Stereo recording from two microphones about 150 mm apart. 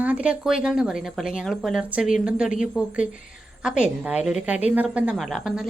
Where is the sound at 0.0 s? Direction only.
10° right (ahead or behind).